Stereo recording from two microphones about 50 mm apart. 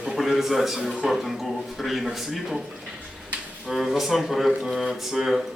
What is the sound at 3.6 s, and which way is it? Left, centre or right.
Speech, centre.